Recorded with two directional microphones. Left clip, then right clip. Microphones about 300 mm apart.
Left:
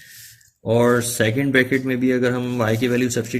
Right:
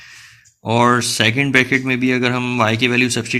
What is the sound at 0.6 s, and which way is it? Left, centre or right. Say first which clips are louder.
Speech: right 3 dB; centre.